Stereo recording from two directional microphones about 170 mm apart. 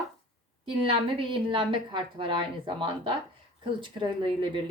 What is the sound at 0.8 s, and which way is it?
A woman's voice, 30° right (ahead or behind).